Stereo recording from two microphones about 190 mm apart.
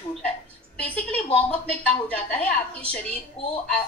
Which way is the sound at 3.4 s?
30° left (ahead or behind).